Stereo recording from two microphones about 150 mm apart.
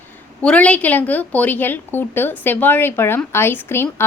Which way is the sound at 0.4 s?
10° left (ahead or behind).